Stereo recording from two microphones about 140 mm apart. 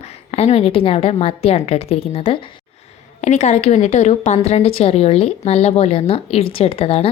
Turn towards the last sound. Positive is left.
turn(degrees=45)  # may be behind; listen again after turning